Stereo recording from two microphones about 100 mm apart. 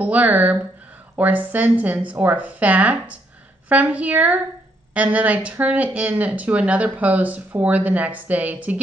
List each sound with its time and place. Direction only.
0.0 s speech: 15° right (ahead or behind)